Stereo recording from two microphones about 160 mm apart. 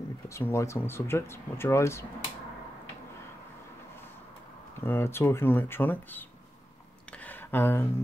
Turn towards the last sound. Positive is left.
turn(degrees=15)  # may be behind; listen again after turning